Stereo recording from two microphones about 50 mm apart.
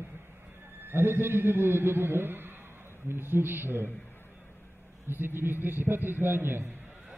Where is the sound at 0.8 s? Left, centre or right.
Right.